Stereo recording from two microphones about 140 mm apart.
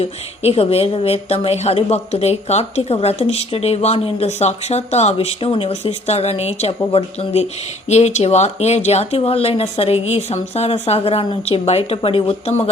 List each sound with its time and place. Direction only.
0.0 s a woman's voice: 45° left (ahead or behind)